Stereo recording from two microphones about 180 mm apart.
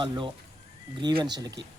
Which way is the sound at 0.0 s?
25° right (ahead or behind).